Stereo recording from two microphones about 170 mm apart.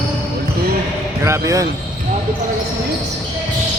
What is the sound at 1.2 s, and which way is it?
Speech, 15° right (ahead or behind).